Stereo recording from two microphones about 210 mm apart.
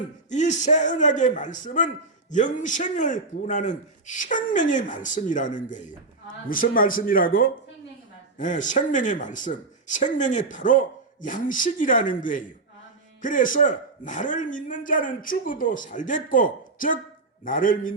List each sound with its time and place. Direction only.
0.3 s a man's voice: 35° left (ahead or behind)